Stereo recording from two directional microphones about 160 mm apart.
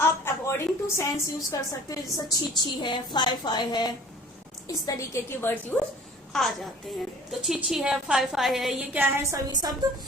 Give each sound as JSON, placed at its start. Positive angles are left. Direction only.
{"t": 0.0, "sound": "a woman's voice", "side_deg": 15}
{"t": 6.3, "sound": "a woman's voice", "side_deg": 5}
{"t": 9.5, "sound": "a woman's voice", "side_deg": -25}